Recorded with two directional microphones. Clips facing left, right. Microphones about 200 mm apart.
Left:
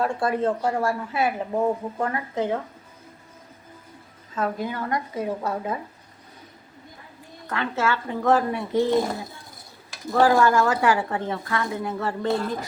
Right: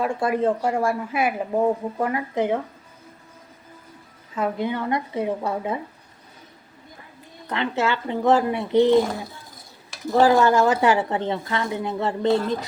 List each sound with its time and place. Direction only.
0.0 s speech: 10° right (ahead or behind)
4.4 s a woman's voice: 20° right (ahead or behind)
7.4 s a woman's voice: 20° right (ahead or behind)
10.1 s a woman's voice: 20° right (ahead or behind)